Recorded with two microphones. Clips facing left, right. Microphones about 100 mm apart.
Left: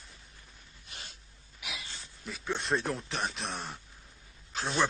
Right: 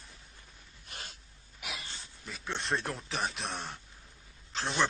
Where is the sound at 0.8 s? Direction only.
45° right (ahead or behind).